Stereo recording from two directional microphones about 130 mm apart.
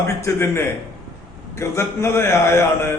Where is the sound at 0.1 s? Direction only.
20° left (ahead or behind).